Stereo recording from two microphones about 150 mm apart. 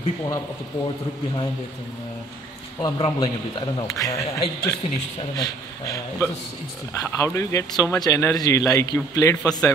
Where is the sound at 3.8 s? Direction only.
20° left (ahead or behind).